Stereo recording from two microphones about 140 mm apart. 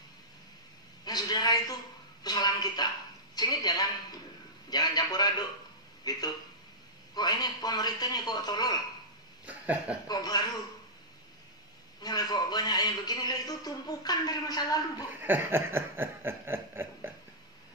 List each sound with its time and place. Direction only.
1.0 s a man's voice: 30° left (ahead or behind)
9.5 s speech: 10° right (ahead or behind)
10.0 s a man's voice: 30° left (ahead or behind)
12.0 s a man's voice: 30° left (ahead or behind)
15.2 s snicker: 15° right (ahead or behind)